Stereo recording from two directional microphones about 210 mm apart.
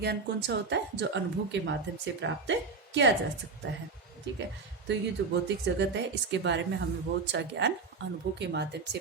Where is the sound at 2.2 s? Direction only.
60° right (ahead or behind).